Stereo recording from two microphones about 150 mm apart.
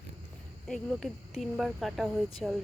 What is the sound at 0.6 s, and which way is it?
Speech, 5° left (ahead or behind).